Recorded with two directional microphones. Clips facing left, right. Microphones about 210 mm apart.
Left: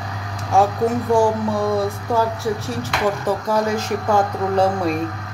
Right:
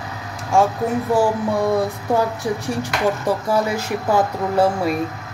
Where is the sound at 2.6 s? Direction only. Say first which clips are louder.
Right 1 dB; 10° right (ahead or behind).